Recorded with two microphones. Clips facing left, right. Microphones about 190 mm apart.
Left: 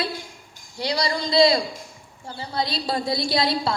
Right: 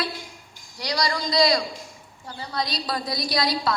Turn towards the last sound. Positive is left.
turn(degrees=25)  # may be behind; listen again after turning